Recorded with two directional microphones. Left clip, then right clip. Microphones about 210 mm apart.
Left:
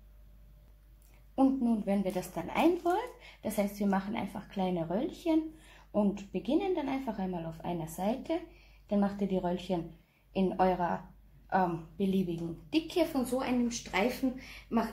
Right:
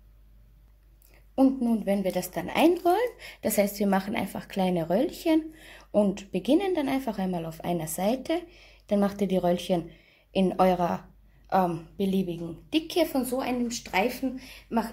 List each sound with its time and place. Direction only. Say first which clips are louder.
1.3 s speech: right 5 dB; 30° right (ahead or behind); by 14.9 s 45° right (ahead or behind)